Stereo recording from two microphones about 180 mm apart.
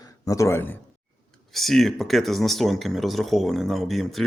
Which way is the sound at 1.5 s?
Centre (ahead or behind).